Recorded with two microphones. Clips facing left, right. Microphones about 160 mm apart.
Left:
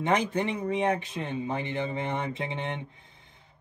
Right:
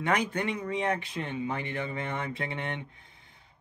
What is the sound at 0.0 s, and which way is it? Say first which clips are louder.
Speech: left 2 dB; 25° left (ahead or behind).